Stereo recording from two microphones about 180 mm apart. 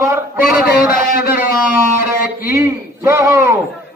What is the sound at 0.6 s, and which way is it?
Speech, 55° left (ahead or behind).